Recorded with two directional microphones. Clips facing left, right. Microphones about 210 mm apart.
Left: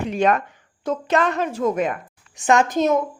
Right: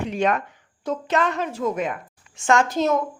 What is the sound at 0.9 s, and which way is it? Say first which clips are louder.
A woman's voice: left 2 dB; 45° left (ahead or behind).